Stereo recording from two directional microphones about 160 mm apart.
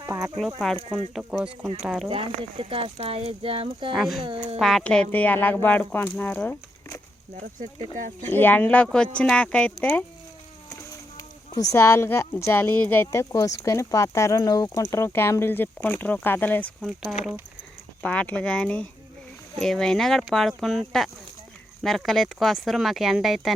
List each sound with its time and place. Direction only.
0.0 s sheep: 15° right (ahead or behind)
0.6 s speech: 5° left (ahead or behind)
2.0 s speech: 35° right (ahead or behind)
3.9 s speech: centre (ahead or behind)
4.2 s speech: 35° right (ahead or behind)
4.5 s speech: centre (ahead or behind); by 7.0 s 15° left (ahead or behind)
7.9 s speech: 50° right (ahead or behind)
8.3 s speech: 10° left (ahead or behind)
11.2 s speech: 20° left (ahead or behind)
18.0 s speech: 5° left (ahead or behind)